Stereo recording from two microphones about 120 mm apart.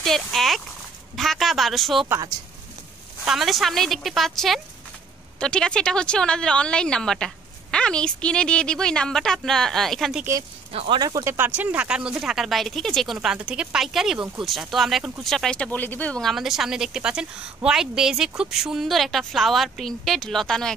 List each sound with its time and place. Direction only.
0.0 s speech: centre (ahead or behind)
3.3 s speech: centre (ahead or behind)
10.7 s speech: 55° right (ahead or behind)
11.0 s speech: 30° right (ahead or behind)
11.3 s speech: 15° right (ahead or behind); by 20.7 s 5° left (ahead or behind)